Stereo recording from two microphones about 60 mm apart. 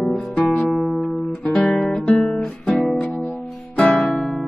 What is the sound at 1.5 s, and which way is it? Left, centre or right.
Guitar, centre.